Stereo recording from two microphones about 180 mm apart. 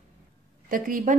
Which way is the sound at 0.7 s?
50° right (ahead or behind).